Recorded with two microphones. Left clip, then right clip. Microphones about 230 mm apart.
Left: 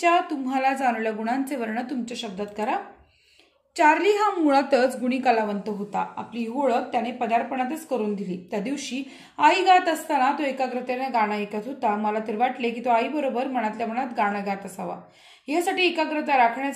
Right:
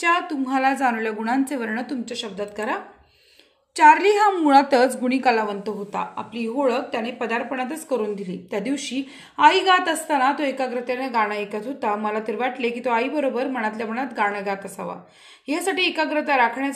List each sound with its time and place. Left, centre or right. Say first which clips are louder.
0.0 s a woman's voice: even; centre